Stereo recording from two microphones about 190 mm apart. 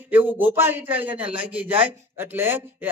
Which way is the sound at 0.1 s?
10° right (ahead or behind).